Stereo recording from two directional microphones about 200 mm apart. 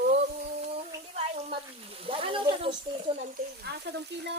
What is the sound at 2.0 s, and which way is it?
Snake, 25° right (ahead or behind).